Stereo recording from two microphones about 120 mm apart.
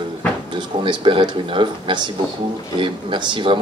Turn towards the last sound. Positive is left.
turn(degrees=-45)  # may be behind; listen again after turning